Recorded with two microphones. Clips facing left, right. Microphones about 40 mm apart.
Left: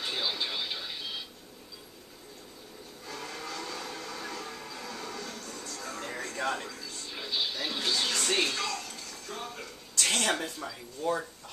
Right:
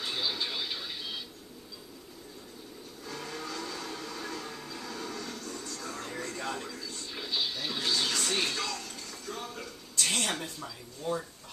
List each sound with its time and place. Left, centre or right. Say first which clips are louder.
0.0 s television: left 1 dB; centre
3.1 s music: even; centre
6.3 s television: left 7 dB; left
6.7 s television: right 1 dB; centre
8.4 s a sound: left 2 dB; centre
10.0 s a sound: left 3 dB; left
10.4 s speech: left 3 dB; left